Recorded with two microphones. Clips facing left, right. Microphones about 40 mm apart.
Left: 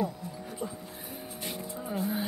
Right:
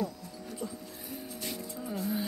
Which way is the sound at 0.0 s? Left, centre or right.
Left.